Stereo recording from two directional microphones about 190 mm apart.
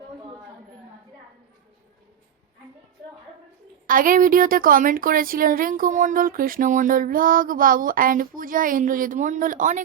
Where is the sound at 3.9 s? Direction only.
45° right (ahead or behind).